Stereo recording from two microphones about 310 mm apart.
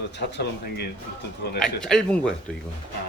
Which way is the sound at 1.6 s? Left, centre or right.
Centre.